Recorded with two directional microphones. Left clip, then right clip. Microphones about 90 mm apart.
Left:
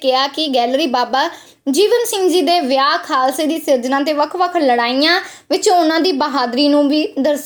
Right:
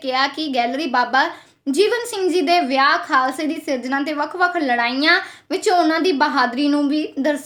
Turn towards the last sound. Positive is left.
turn(degrees=15)  # may be behind; listen again after turning